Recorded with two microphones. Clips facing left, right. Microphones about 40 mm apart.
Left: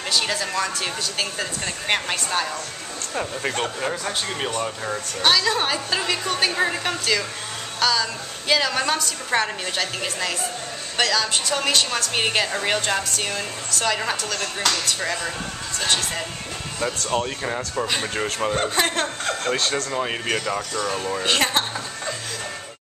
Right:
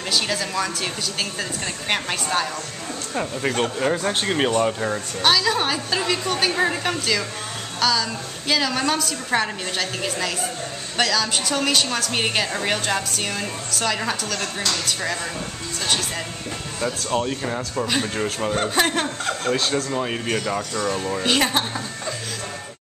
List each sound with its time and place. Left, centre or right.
0.1 s a woman's voice: centre
4.1 s speech: right
4.6 s speech: centre
5.2 s a woman's voice: centre
17.1 s a woman's voice: centre
19.9 s a woman's voice: centre